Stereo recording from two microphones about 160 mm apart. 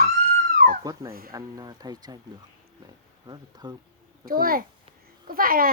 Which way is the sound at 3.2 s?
25° right (ahead or behind).